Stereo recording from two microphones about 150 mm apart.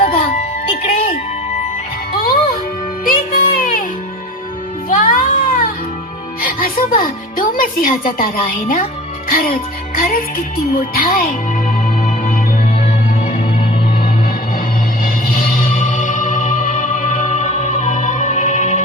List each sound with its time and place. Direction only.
0.0 s music: 70° left (ahead or behind)
2.1 s music: 80° left
4.9 s music: 70° left (ahead or behind)
9.3 s music: 75° left (ahead or behind)
10.8 s speech: 75° left (ahead or behind)
12.0 s music: 65° left (ahead or behind)
15.0 s music: 70° left (ahead or behind); by 18.8 s 55° left (ahead or behind)